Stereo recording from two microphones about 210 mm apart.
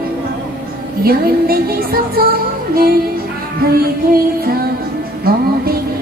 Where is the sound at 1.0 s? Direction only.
45° right (ahead or behind).